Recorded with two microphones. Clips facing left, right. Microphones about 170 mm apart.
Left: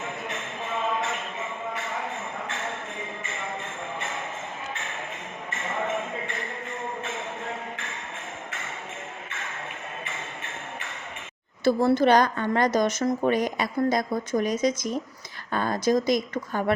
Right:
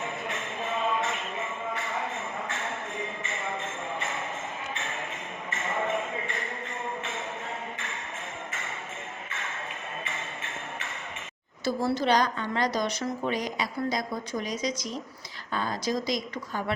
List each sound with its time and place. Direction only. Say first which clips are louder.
11.6 s a woman's voice: left 7 dB; 55° left (ahead or behind)